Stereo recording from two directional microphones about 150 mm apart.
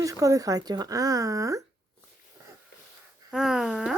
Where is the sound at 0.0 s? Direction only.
20° right (ahead or behind).